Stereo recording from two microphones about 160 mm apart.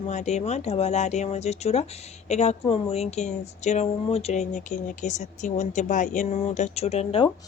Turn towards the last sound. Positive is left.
turn(degrees=40)  # may be behind; listen again after turning